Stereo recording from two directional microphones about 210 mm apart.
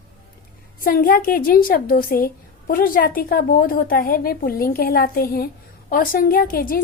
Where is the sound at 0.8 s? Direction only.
45° left (ahead or behind).